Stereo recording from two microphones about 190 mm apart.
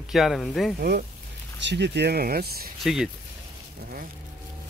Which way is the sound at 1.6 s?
65° right (ahead or behind).